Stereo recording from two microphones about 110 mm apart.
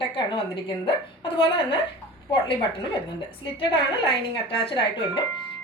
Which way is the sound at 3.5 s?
55° left (ahead or behind).